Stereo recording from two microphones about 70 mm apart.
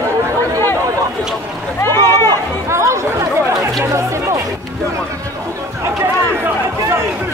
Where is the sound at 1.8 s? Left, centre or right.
Left.